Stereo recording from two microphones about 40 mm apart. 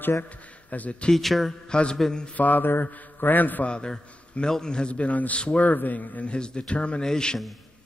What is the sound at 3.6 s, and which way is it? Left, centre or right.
A man's voice, left.